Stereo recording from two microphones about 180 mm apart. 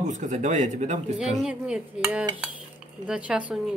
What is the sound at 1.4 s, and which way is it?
Dishes, 5° right (ahead or behind).